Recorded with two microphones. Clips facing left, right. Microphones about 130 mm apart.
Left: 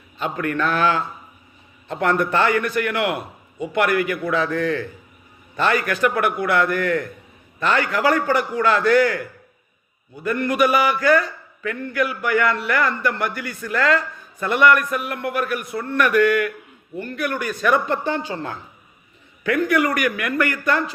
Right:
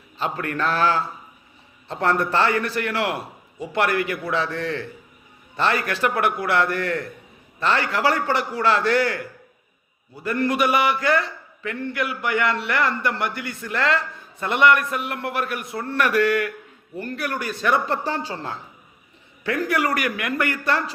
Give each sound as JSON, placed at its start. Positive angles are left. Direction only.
{"t": 0.2, "sound": "a man's voice", "side_deg": -30}
{"t": 10.2, "sound": "a man's voice", "side_deg": -25}